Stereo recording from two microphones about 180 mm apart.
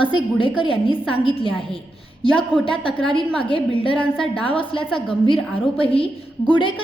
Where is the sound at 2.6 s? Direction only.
30° left (ahead or behind).